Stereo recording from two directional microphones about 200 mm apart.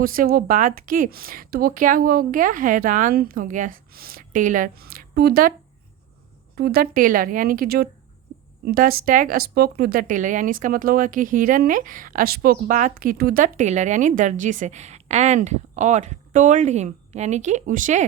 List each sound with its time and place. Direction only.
0.0 s speech: 45° right (ahead or behind)
6.6 s speech: 50° right (ahead or behind)